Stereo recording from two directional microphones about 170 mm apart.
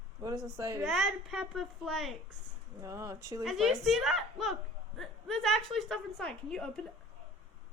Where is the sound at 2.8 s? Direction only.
20° right (ahead or behind).